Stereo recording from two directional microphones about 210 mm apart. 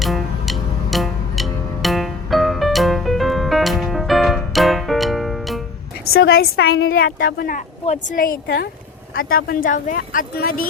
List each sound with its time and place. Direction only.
0.0 s music: centre (ahead or behind)
6.1 s a woman's voice: 50° left (ahead or behind)
6.7 s a woman's voice: 75° left (ahead or behind)
7.0 s speech: 45° left (ahead or behind)